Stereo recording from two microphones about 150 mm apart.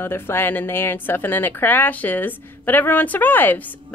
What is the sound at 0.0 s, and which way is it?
Speech, 15° left (ahead or behind).